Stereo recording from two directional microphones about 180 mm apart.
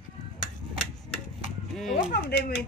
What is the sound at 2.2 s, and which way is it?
Speech, 60° left (ahead or behind).